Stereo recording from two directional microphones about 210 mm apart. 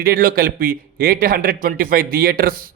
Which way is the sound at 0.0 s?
45° right (ahead or behind).